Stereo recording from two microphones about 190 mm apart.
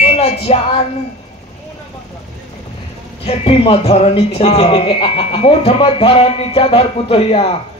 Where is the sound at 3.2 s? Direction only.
30° left (ahead or behind).